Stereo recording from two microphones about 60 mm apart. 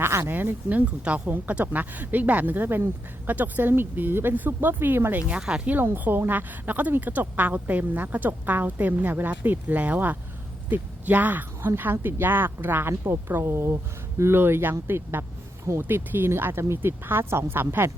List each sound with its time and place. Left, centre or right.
0.0 s speech: right
0.3 s speech: right
5.3 s speech: centre
5.6 s speech: right